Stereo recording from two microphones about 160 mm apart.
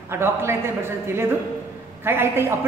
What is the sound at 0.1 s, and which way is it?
A woman's voice, 15° right (ahead or behind).